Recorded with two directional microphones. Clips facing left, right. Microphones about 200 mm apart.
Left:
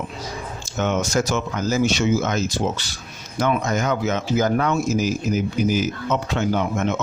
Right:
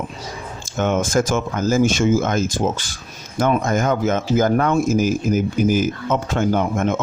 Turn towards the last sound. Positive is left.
turn(degrees=-50)  # may be behind; listen again after turning